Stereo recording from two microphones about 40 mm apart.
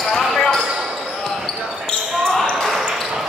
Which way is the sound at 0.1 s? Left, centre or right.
Centre.